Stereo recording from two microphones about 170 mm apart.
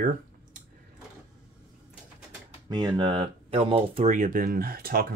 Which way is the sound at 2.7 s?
25° right (ahead or behind).